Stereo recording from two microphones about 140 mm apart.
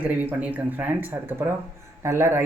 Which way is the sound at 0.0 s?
10° right (ahead or behind).